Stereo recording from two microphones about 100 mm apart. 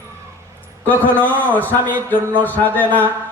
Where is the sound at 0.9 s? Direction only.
15° left (ahead or behind).